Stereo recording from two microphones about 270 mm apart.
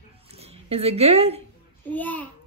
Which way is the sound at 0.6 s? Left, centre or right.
Right.